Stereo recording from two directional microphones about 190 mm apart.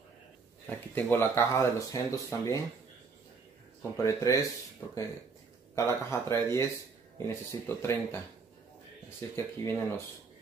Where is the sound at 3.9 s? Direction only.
15° left (ahead or behind).